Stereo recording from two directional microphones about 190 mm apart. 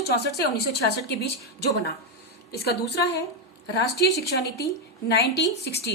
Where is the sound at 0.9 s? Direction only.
60° left (ahead or behind).